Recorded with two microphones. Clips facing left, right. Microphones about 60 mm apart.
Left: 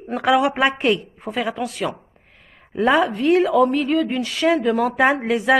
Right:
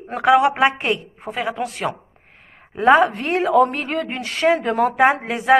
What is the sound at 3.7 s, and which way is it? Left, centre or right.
A woman's voice, right.